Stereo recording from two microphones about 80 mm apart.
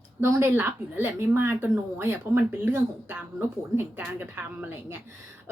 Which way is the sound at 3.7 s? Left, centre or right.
Right.